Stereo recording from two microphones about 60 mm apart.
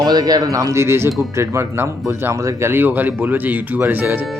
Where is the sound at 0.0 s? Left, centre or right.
Right.